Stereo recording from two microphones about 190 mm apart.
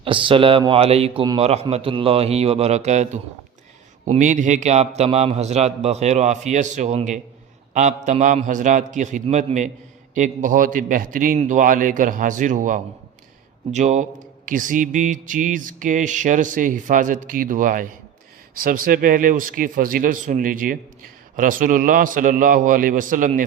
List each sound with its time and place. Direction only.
0.0 s a man's voice: 25° right (ahead or behind)
10.2 s mantra: 40° right (ahead or behind)